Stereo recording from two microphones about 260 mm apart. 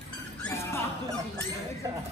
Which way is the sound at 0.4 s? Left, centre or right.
Centre.